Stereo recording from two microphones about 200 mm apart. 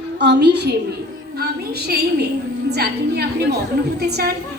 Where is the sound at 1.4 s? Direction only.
50° right (ahead or behind).